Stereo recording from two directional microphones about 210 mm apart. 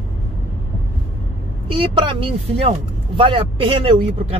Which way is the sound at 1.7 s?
25° right (ahead or behind).